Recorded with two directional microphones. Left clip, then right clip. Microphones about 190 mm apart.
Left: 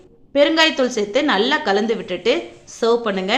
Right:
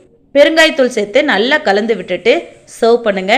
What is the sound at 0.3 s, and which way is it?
A woman's voice, 15° right (ahead or behind).